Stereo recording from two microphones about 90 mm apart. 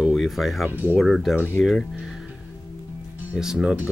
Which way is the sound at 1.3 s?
25° left (ahead or behind).